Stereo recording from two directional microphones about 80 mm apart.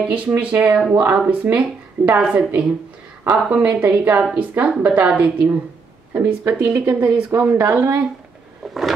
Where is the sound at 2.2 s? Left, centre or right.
Centre.